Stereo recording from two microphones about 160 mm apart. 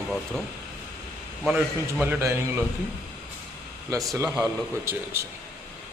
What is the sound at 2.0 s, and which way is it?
Speech, 15° right (ahead or behind).